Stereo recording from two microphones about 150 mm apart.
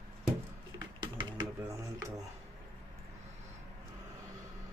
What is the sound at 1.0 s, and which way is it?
Typewriter, 30° right (ahead or behind).